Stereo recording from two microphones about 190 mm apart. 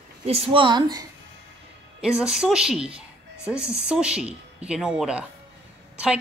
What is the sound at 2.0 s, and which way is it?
A woman's voice, 5° right (ahead or behind).